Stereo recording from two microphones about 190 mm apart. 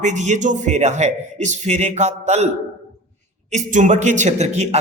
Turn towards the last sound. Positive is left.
turn(degrees=-35)  # may be behind; listen again after turning